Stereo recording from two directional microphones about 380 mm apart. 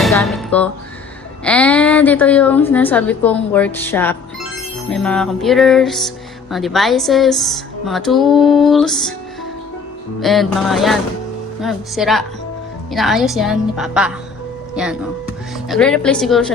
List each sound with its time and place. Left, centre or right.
0.0 s a sound: centre
1.5 s a woman's voice: centre
10.2 s a woman's voice: centre